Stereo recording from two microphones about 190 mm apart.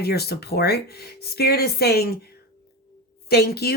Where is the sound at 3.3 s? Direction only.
55° left (ahead or behind).